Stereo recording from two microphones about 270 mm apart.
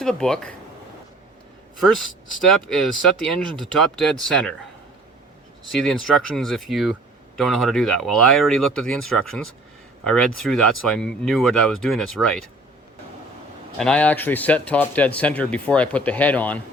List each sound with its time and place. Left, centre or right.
0.0 s a man's voice: centre
2.6 s a man's voice: centre
5.7 s a man's voice: centre
13.7 s a man's voice: centre